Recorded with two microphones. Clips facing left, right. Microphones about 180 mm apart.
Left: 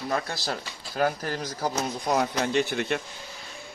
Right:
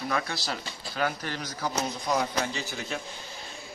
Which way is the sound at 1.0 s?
40° left (ahead or behind).